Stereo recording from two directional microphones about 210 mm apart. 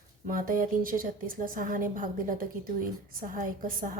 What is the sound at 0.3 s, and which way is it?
A woman's voice, 40° right (ahead or behind).